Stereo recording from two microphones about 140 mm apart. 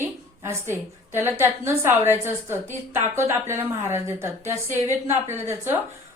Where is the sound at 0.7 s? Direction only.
15° right (ahead or behind).